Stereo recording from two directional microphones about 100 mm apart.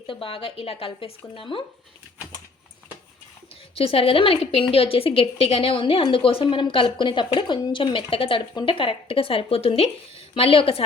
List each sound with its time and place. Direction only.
0.1 s speech: 65° left (ahead or behind)
3.8 s a woman's voice: 70° left (ahead or behind); by 9.8 s 85° left
10.3 s speech: 70° left (ahead or behind)